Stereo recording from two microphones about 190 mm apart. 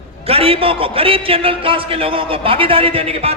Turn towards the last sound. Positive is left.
turn(degrees=-30)  # may be behind; listen again after turning